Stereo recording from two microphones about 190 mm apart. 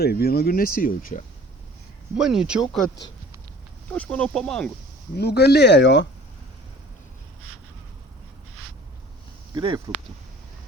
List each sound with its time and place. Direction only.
0.0 s speech: 55° left (ahead or behind)
2.1 s speech: 5° right (ahead or behind)
3.8 s speech: 5° left (ahead or behind)
5.1 s speech: 60° left (ahead or behind)
9.6 s speech: 25° right (ahead or behind)